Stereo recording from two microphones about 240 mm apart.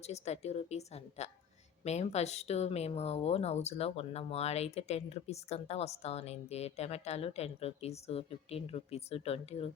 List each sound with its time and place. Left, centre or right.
0.1 s speech: left